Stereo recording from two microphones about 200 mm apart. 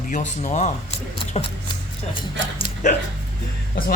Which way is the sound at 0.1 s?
35° left (ahead or behind).